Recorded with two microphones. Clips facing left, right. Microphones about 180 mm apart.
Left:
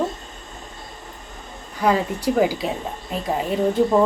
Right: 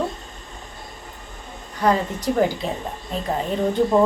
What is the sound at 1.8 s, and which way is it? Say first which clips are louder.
A woman's voice: left 1 dB; 10° left (ahead or behind).